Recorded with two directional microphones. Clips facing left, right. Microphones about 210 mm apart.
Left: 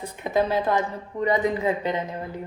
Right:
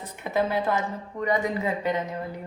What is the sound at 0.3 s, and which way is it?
Speech, 20° left (ahead or behind).